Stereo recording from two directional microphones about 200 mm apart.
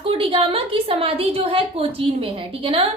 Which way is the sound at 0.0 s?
25° right (ahead or behind).